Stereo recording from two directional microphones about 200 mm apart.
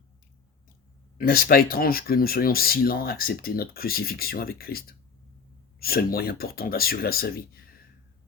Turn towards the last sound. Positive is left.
turn(degrees=50)  # may be behind; listen again after turning